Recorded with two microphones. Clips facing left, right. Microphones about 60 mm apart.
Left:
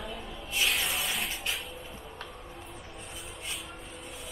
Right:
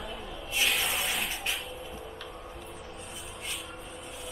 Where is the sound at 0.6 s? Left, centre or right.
Centre.